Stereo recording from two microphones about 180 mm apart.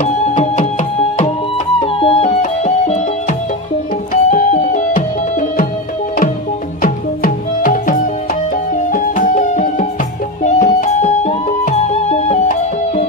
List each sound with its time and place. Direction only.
0.0 s music: 40° left (ahead or behind)
6.8 s music: 50° left (ahead or behind)